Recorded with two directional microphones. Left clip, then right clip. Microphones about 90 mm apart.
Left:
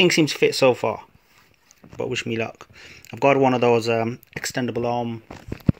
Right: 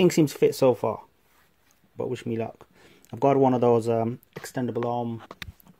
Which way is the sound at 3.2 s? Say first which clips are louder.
Left 3 dB; 50° right (ahead or behind).